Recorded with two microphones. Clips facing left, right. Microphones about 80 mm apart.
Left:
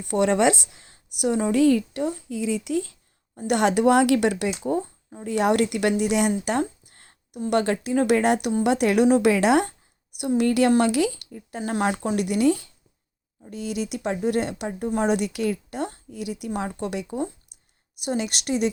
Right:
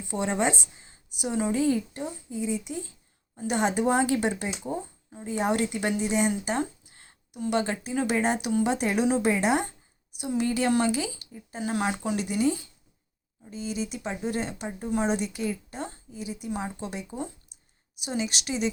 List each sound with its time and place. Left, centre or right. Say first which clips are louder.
0.0 s a woman's voice: left 7 dB; left
3.4 s a woman's voice: left 6 dB; left
9.2 s a woman's voice: left 6 dB; left
11.8 s a woman's voice: left 6 dB; left
12.2 s a woman's voice: left 6 dB; left
16.5 s speech: left 5 dB; left
18.0 s a woman's voice: left 4 dB; left